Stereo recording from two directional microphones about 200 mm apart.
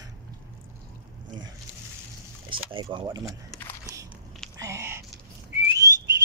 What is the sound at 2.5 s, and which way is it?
Speech, 25° right (ahead or behind).